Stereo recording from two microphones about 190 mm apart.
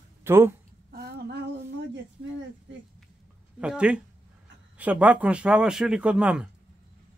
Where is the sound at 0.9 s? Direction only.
55° right (ahead or behind).